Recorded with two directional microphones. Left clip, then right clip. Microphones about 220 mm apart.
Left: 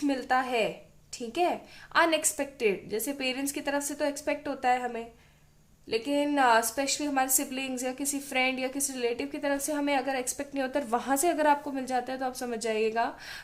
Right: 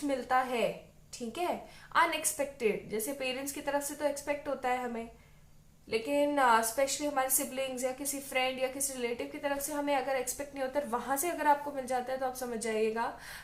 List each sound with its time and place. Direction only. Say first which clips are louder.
0.1 s a woman's voice: left 1 dB; 45° left (ahead or behind)